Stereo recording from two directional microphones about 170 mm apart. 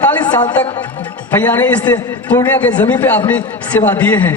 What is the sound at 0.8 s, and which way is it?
A man's voice, 10° left (ahead or behind).